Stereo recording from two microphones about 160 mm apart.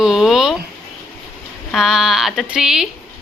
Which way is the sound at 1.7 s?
5° right (ahead or behind).